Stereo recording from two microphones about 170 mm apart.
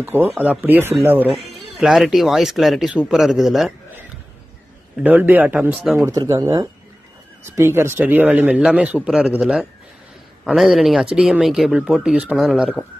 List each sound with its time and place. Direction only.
0.0 s a man's voice: 10° right (ahead or behind)
1.3 s speech: centre (ahead or behind)
5.0 s a man's voice: 10° right (ahead or behind)